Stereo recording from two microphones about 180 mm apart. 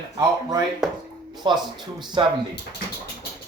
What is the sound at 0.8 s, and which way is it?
Speech, centre (ahead or behind).